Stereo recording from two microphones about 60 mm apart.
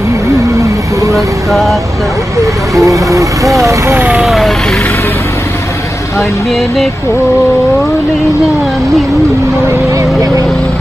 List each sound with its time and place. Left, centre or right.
1.1 s speech: centre
2.4 s vehicle: right
3.5 s speech: right
4.2 s vehicle: centre